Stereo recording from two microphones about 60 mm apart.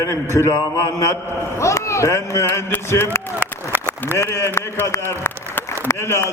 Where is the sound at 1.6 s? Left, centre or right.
Left.